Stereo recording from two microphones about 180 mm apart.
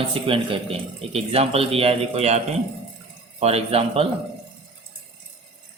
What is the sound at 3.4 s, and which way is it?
Speech, 35° right (ahead or behind).